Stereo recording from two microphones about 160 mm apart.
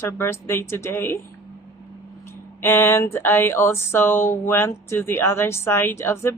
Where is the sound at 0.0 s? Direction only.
15° left (ahead or behind).